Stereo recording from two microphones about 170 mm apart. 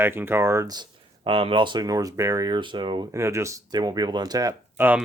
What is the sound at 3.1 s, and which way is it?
Speech, 15° right (ahead or behind).